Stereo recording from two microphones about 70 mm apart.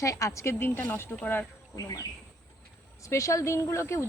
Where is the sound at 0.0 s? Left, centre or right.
Left.